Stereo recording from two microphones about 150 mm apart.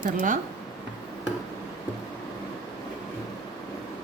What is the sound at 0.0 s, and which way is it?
Speech, 65° right (ahead or behind).